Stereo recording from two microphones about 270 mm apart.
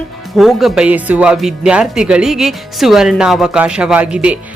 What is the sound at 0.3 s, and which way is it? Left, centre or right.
A woman's voice, centre.